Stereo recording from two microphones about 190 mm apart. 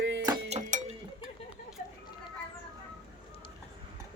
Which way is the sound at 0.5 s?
35° right (ahead or behind).